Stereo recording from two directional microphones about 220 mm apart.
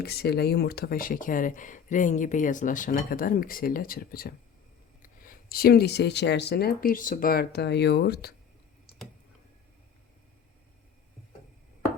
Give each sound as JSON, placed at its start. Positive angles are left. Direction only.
{"t": 0.0, "sound": "speech", "side_deg": 45}